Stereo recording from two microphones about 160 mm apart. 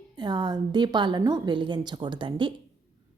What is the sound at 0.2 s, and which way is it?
A woman's voice, 25° right (ahead or behind).